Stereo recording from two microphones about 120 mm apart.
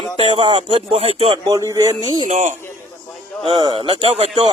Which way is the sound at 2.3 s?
75° right (ahead or behind).